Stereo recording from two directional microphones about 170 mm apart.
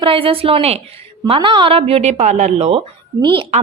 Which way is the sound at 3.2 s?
30° right (ahead or behind).